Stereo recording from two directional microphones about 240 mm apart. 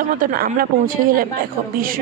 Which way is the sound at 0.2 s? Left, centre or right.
Right.